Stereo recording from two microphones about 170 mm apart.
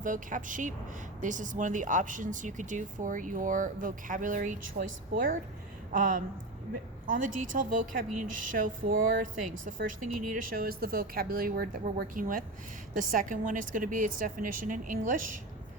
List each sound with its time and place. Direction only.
0.0 s speech: 50° right (ahead or behind)